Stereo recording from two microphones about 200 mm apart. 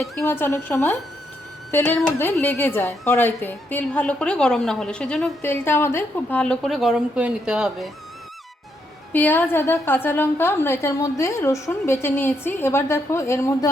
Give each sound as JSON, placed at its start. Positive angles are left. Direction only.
{"t": 0.0, "sound": "a woman's voice", "side_deg": 5}
{"t": 9.1, "sound": "a woman's voice", "side_deg": 10}